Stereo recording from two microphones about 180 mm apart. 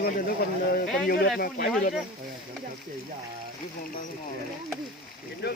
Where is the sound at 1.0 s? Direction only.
60° left (ahead or behind).